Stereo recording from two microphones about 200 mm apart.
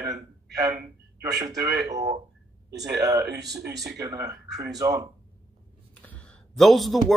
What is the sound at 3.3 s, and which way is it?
Speech, 55° right (ahead or behind).